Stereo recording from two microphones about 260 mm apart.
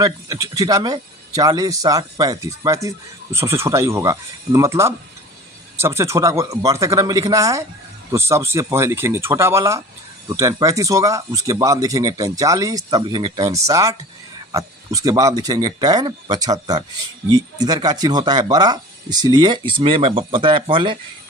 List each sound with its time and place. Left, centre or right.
0.0 s speech: centre